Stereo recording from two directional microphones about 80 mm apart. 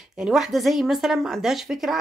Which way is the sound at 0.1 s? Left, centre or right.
Centre.